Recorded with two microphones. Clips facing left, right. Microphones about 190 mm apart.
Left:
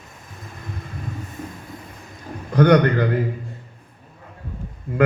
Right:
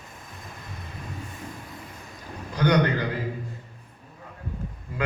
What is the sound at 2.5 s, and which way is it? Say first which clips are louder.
Speech: left 7 dB; 55° left (ahead or behind).